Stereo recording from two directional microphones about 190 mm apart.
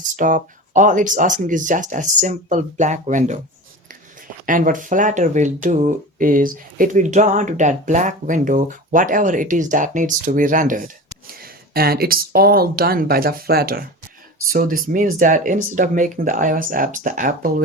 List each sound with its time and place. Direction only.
0.2 s speech: 45° right (ahead or behind)
4.4 s speech: 45° right (ahead or behind)